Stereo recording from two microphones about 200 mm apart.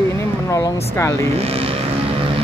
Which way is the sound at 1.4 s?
30° right (ahead or behind).